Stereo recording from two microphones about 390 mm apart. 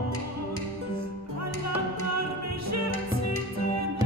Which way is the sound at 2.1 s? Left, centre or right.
Right.